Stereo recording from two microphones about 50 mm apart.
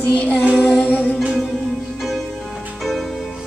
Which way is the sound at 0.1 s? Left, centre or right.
Left.